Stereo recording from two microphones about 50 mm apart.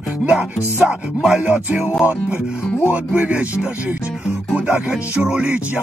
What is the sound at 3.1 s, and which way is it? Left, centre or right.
Music, right.